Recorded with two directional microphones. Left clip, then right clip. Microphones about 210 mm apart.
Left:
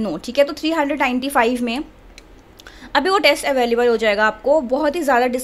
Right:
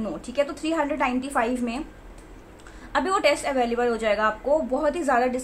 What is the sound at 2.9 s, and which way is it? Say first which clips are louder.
A woman's voice: left 6 dB; 35° left (ahead or behind).